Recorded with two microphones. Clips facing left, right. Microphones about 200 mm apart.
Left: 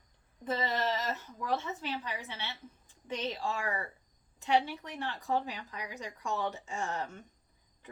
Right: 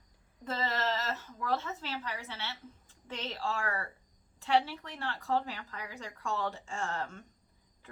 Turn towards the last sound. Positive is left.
turn(degrees=15)  # may be behind; listen again after turning